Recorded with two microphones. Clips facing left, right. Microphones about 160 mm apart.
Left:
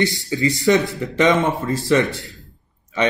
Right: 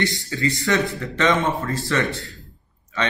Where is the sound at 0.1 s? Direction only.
20° left (ahead or behind).